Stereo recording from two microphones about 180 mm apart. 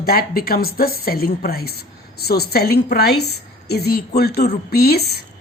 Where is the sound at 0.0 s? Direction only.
55° left (ahead or behind).